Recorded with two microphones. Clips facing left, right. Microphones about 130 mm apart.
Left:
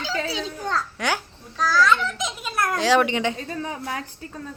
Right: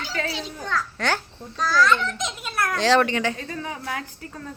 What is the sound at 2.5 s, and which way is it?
Speech, 20° left (ahead or behind).